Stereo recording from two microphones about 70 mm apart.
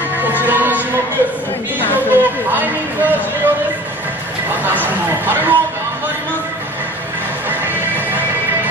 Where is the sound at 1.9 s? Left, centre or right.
Right.